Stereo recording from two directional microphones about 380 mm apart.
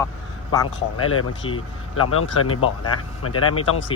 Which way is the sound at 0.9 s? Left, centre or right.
Left.